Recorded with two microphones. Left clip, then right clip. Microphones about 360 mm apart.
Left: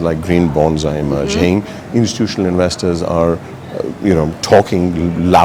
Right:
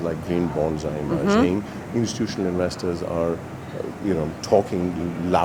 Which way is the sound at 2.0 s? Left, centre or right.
Left.